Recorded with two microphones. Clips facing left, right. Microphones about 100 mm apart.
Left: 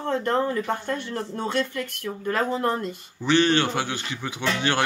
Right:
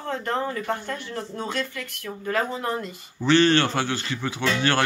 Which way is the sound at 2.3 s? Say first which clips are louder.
Left 2 dB; 40° left (ahead or behind).